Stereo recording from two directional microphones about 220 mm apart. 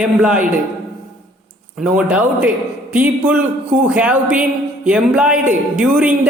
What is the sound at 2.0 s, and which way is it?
A woman's voice, 5° right (ahead or behind).